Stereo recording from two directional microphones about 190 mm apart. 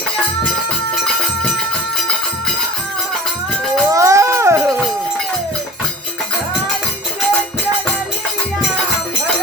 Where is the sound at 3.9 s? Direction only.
15° right (ahead or behind).